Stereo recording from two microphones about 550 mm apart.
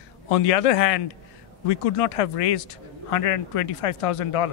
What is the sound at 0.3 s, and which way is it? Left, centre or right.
A man's voice, left.